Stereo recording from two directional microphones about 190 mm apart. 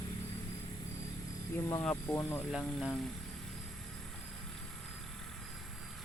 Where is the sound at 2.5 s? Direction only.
Centre (ahead or behind).